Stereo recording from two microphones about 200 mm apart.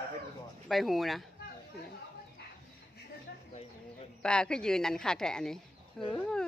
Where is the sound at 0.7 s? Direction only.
Centre (ahead or behind).